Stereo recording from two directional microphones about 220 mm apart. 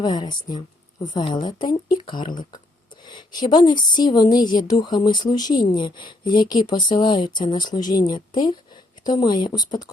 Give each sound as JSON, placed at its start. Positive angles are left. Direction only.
{"t": 0.0, "sound": "speech", "side_deg": 20}